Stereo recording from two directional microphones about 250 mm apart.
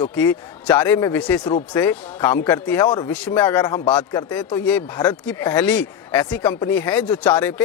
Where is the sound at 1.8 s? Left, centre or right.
Centre.